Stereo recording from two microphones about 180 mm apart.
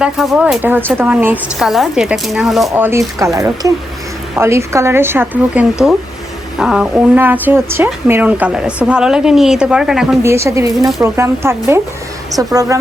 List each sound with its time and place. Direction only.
0.0 s a woman's voice: 5° right (ahead or behind)
3.2 s a woman's voice: 15° right (ahead or behind)
10.2 s speech: 15° right (ahead or behind)